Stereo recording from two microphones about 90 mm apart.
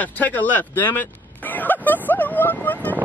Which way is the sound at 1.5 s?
20° left (ahead or behind).